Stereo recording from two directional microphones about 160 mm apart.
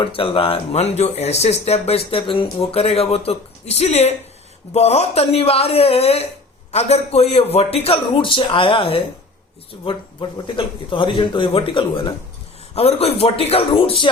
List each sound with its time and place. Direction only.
0.0 s speech: 35° left (ahead or behind)